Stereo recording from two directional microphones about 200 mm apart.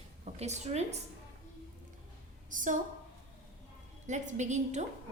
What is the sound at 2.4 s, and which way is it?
Speech, 40° right (ahead or behind).